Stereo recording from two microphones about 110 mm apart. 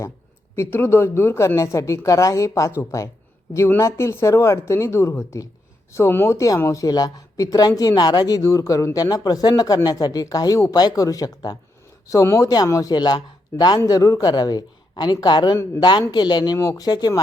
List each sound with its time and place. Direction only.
0.5 s speech: 20° left (ahead or behind); by 17.2 s 40° left (ahead or behind)